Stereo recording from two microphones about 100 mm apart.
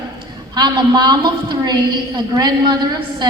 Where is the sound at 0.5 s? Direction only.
45° right (ahead or behind).